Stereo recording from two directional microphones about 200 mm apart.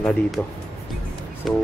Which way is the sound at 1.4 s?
Centre (ahead or behind).